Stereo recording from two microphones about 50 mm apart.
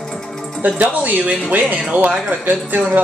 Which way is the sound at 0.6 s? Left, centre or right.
Right.